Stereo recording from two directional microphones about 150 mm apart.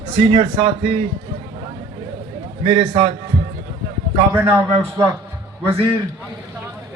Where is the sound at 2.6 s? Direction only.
35° right (ahead or behind).